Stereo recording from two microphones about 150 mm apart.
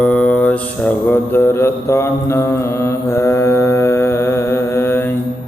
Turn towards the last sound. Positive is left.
turn(degrees=15)  # may be behind; listen again after turning